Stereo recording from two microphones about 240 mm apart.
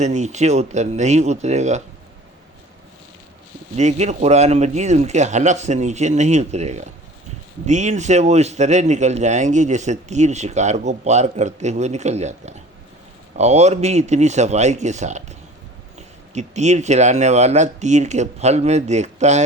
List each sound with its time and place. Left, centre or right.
0.0 s speech: right
3.8 s speech: right